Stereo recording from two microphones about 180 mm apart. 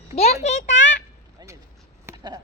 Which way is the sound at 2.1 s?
20° right (ahead or behind).